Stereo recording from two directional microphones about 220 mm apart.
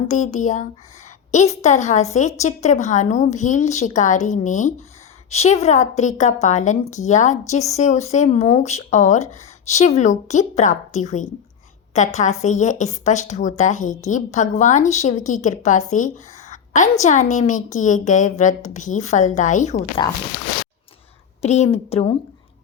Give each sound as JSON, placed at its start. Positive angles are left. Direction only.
{"t": 0.1, "sound": "a woman's voice", "side_deg": 35}
{"t": 20.0, "sound": "a woman's voice", "side_deg": 20}
{"t": 21.4, "sound": "a woman's voice", "side_deg": 30}